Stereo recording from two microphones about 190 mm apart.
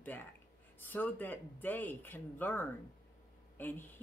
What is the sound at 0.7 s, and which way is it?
Speech, 10° left (ahead or behind).